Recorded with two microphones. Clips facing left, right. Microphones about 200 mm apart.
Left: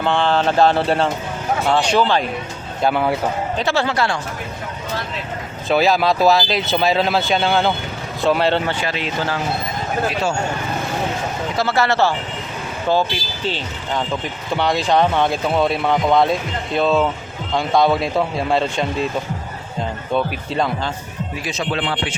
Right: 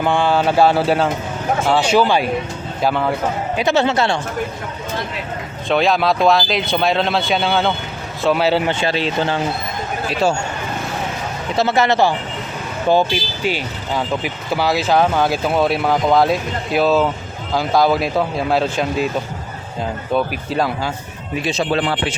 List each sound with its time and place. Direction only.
0.0 s speech: 10° right (ahead or behind)
2.8 s speech: 5° left (ahead or behind)
3.6 s speech: 20° right (ahead or behind)
5.6 s speech: 5° left (ahead or behind)
8.6 s speech: 25° right (ahead or behind)
11.5 s speech: 20° right (ahead or behind); by 19.0 s 5° right (ahead or behind)
20.1 s speech: 5° right (ahead or behind)
21.3 s speech: 30° right (ahead or behind)